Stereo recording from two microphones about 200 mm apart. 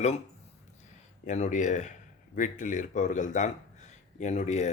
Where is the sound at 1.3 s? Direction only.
35° left (ahead or behind).